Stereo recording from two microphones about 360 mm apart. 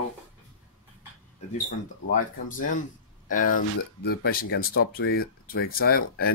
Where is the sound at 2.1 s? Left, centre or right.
Left.